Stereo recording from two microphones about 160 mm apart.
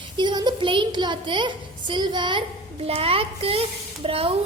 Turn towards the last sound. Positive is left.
turn(degrees=-35)  # may be behind; listen again after turning